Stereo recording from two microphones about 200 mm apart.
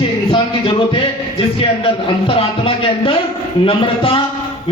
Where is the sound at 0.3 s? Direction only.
25° left (ahead or behind).